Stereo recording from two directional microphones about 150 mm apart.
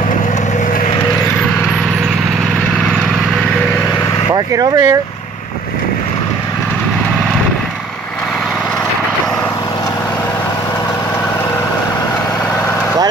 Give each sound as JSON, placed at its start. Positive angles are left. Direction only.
{"t": 4.3, "sound": "speech", "side_deg": -25}